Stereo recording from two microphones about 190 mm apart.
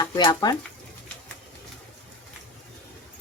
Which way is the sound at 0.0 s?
20° left (ahead or behind).